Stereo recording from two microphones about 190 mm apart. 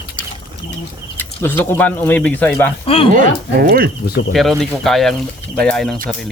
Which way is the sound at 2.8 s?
30° left (ahead or behind).